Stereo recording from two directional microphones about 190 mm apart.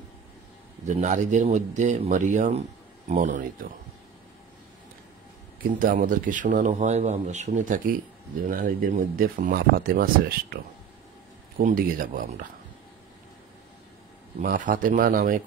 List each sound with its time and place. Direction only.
0.8 s speech: 40° right (ahead or behind)
5.7 s speech: 45° right (ahead or behind)
14.4 s speech: 45° right (ahead or behind)